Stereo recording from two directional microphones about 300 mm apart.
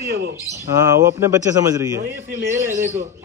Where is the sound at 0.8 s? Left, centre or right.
Centre.